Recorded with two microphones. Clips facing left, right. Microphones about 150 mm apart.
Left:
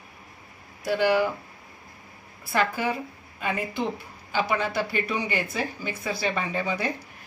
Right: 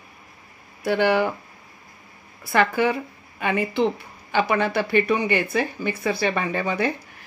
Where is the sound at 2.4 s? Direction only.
70° right (ahead or behind).